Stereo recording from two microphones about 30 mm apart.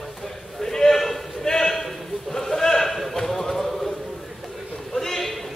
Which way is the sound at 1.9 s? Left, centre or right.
Centre.